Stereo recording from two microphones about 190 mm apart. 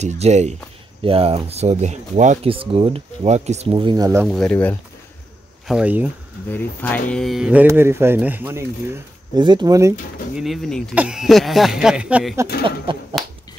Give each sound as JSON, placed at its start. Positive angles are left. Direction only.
{"t": 0.0, "sound": "speech", "side_deg": -35}
{"t": 3.7, "sound": "speech", "side_deg": -20}
{"t": 4.2, "sound": "speech", "side_deg": 0}
{"t": 5.7, "sound": "speech", "side_deg": -5}
{"t": 6.5, "sound": "speech", "side_deg": 10}
{"t": 9.4, "sound": "speech", "side_deg": -25}
{"t": 10.3, "sound": "speech", "side_deg": 0}